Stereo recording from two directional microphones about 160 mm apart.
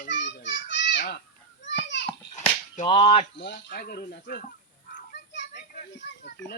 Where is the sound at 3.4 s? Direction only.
85° left; by 4.4 s 65° left (ahead or behind).